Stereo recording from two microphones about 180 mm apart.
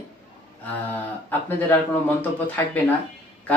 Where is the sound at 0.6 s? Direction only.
10° left (ahead or behind).